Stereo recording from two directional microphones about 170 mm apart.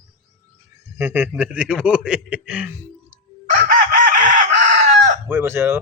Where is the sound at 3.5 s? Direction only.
50° right (ahead or behind).